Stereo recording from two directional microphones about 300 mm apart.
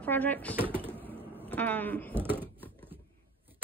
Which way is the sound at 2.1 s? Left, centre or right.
Centre.